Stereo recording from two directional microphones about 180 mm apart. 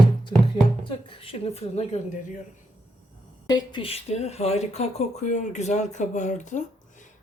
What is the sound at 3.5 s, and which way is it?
Speech, 25° left (ahead or behind).